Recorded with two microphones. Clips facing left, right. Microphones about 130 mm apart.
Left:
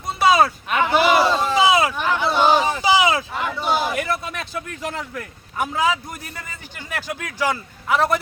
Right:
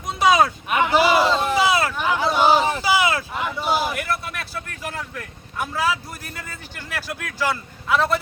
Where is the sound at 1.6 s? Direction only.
15° left (ahead or behind).